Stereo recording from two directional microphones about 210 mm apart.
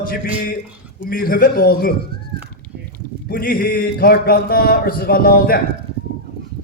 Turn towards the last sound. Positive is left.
turn(degrees=45)  # may be behind; listen again after turning